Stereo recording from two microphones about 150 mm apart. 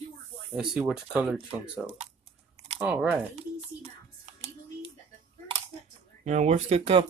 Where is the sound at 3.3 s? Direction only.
45° right (ahead or behind).